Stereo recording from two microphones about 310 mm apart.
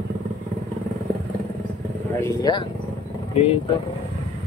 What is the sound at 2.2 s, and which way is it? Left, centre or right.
Speech, centre.